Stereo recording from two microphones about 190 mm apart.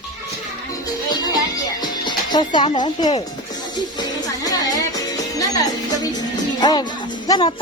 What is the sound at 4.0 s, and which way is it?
Music, 20° left (ahead or behind).